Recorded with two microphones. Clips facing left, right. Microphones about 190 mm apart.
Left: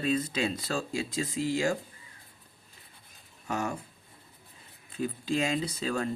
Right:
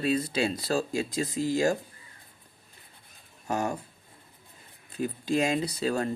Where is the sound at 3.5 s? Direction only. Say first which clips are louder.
Right 3 dB; 35° right (ahead or behind).